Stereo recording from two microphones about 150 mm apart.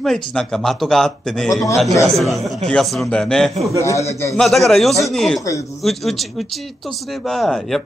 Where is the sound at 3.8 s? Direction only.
20° left (ahead or behind).